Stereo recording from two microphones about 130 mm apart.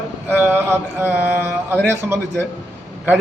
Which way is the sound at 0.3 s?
15° right (ahead or behind).